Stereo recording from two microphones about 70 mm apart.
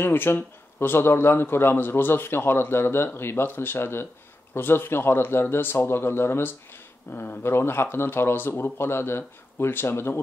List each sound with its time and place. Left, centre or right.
0.0 s a man's voice: left